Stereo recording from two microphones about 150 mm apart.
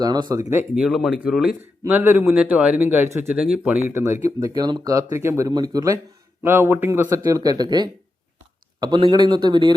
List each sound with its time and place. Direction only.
0.0 s speech: 25° right (ahead or behind)
0.8 s speech: 5° right (ahead or behind)
1.8 s a man's voice: 15° right (ahead or behind)